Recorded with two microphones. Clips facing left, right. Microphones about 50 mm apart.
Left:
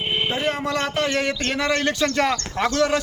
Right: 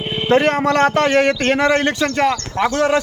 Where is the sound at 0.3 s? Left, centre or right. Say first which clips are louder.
Right 9 dB; right.